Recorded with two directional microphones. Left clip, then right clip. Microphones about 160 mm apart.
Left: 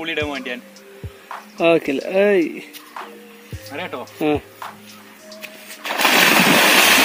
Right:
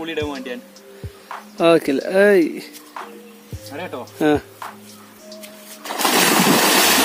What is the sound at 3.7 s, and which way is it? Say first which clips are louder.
Speech: left 1 dB; 5° left (ahead or behind).